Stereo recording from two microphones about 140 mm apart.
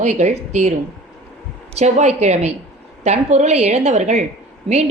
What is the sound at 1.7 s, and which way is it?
A woman's voice, 50° right (ahead or behind).